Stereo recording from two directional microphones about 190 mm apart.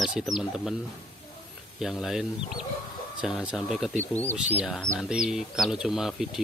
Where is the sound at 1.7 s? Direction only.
Centre (ahead or behind).